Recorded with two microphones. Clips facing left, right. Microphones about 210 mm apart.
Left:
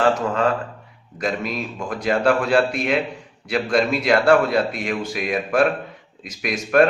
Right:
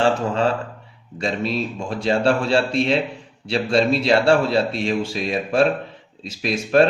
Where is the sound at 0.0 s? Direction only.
30° right (ahead or behind).